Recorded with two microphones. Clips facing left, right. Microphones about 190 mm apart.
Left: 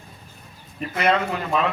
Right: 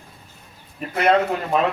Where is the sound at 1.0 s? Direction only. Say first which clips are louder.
Right 4 dB; 45° right (ahead or behind).